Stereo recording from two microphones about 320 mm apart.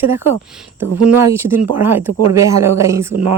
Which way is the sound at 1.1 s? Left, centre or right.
Centre.